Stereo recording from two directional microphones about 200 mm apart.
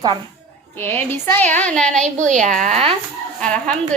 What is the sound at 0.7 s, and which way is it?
A woman's voice, 10° left (ahead or behind).